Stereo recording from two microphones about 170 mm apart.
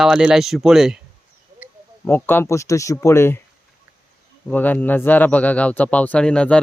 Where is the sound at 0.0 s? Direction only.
5° right (ahead or behind).